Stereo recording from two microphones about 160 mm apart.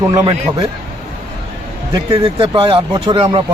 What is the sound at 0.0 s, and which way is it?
Speech, 20° right (ahead or behind).